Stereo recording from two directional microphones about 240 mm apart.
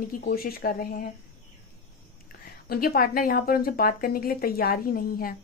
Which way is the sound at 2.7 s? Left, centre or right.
Left.